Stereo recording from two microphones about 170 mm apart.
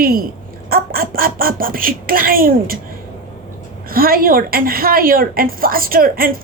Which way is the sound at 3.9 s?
60° right (ahead or behind).